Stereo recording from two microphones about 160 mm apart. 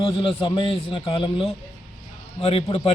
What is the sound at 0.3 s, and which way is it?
A man's voice, 30° left (ahead or behind).